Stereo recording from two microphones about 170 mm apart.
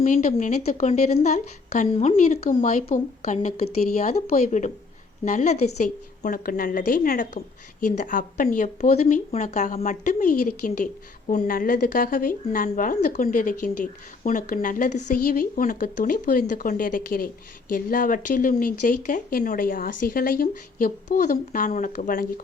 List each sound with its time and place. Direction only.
0.0 s a woman's voice: 50° left (ahead or behind)